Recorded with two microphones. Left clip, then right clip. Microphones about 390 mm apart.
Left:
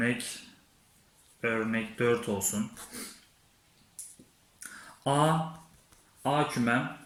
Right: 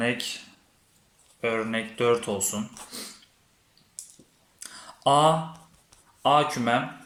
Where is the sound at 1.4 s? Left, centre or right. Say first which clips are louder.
Right 3 dB; centre.